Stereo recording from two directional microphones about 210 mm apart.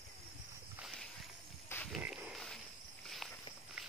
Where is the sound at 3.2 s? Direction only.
Centre (ahead or behind).